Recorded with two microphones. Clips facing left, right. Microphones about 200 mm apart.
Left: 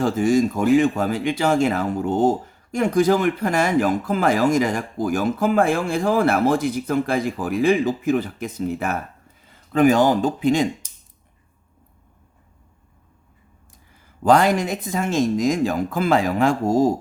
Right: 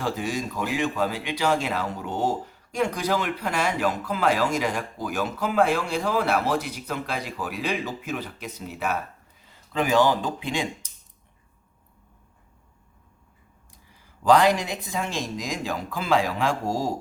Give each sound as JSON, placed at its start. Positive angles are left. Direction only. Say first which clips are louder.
{"t": 0.0, "sound": "speech", "louder": "left 10 dB", "side_deg": 50}
{"t": 14.3, "sound": "speech", "louder": "left 2 dB", "side_deg": 50}